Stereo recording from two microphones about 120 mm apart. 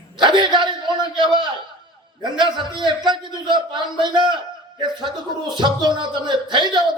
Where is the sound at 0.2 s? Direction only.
40° right (ahead or behind).